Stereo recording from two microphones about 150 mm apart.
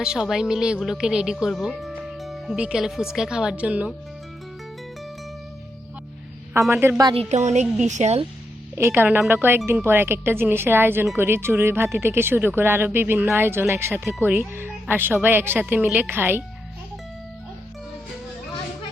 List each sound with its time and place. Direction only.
0.0 s a woman's voice: 5° right (ahead or behind)
6.5 s speech: 15° right (ahead or behind)
7.1 s a woman's voice: 45° right (ahead or behind)
8.7 s speech: 15° right (ahead or behind)